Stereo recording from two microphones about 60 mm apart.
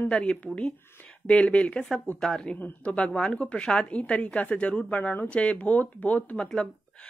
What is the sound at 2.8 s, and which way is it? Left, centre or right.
A woman's voice, centre.